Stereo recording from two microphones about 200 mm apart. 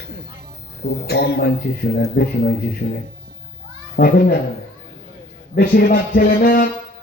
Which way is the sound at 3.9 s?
50° left (ahead or behind).